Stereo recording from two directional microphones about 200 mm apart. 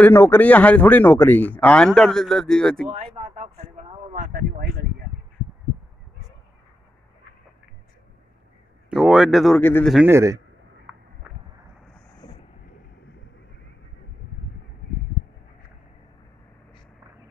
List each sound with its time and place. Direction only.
0.0 s speech: 10° left (ahead or behind)
2.9 s speech: 30° right (ahead or behind)
4.3 s speech: 50° right (ahead or behind)
8.9 s speech: 5° right (ahead or behind)
9.6 s speech: 10° left (ahead or behind)
9.9 s a man's voice: 10° right (ahead or behind)